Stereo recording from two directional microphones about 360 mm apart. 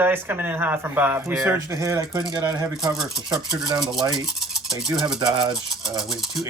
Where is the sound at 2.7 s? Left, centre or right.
Centre.